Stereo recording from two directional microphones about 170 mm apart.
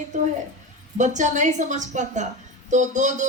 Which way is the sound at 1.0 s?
45° right (ahead or behind).